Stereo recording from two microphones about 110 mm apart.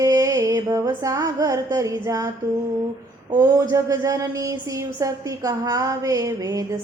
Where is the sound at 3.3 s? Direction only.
30° right (ahead or behind).